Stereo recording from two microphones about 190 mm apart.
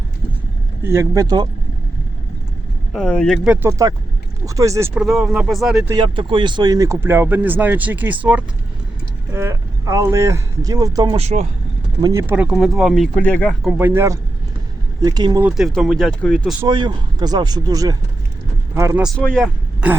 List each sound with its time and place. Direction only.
0.9 s speech: 15° right (ahead or behind)
2.9 s speech: 5° left (ahead or behind); by 4.9 s 15° right (ahead or behind)
4.9 s speech: centre (ahead or behind)
5.9 s speech: 25° right (ahead or behind)
11.2 s speech: 35° right (ahead or behind)
11.9 s speech: 15° right (ahead or behind); by 13.6 s 5° left (ahead or behind)
13.7 s speech: 10° right (ahead or behind)
15.4 s speech: centre (ahead or behind)
16.6 s speech: 25° right (ahead or behind)
19.0 s speech: 5° left (ahead or behind)